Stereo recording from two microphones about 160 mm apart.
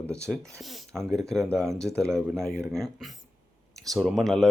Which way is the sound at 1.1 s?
5° left (ahead or behind).